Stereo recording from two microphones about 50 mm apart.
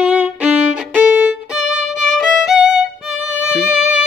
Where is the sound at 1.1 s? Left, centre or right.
Right.